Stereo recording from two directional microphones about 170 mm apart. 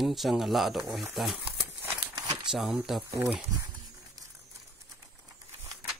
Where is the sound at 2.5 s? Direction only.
Centre (ahead or behind).